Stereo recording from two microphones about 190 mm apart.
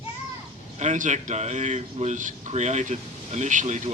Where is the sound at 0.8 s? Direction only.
40° right (ahead or behind).